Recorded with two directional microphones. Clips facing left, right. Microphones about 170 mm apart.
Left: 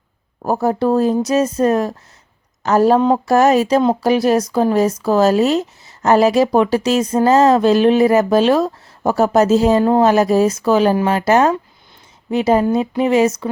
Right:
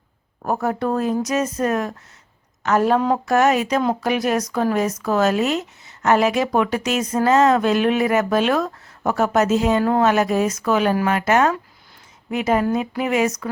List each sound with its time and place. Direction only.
0.4 s a woman's voice: 30° left (ahead or behind)